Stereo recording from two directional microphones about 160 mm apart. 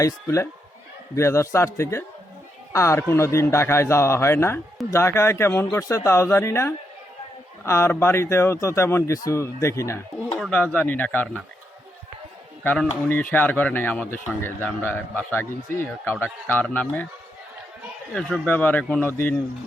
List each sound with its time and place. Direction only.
0.0 s speech: 20° left (ahead or behind)
12.6 s speech: 5° left (ahead or behind)
18.1 s speech: centre (ahead or behind)